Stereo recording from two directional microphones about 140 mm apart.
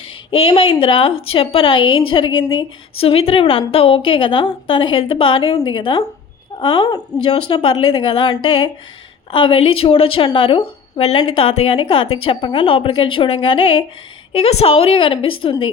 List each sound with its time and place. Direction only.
0.3 s speech: 40° left (ahead or behind)